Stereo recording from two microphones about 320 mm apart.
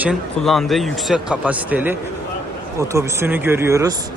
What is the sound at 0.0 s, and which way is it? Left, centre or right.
Speech, centre.